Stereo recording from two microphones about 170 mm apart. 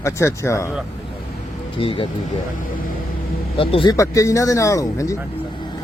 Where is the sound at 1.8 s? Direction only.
30° left (ahead or behind).